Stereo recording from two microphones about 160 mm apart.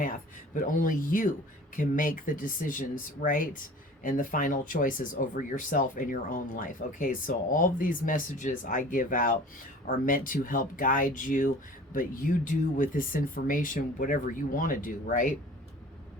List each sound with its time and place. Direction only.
0.5 s speech: 55° left (ahead or behind)